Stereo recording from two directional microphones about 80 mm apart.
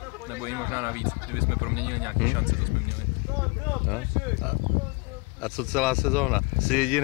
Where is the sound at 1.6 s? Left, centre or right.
Centre.